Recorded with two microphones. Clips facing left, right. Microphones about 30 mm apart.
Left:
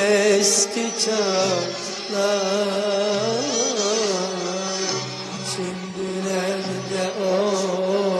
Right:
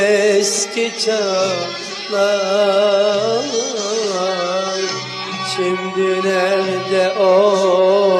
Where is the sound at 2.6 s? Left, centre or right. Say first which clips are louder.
Right 9 dB; right.